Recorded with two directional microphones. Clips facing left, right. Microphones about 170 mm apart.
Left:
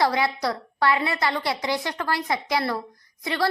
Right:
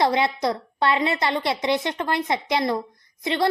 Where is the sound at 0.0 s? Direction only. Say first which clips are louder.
Right 2 dB; 20° right (ahead or behind).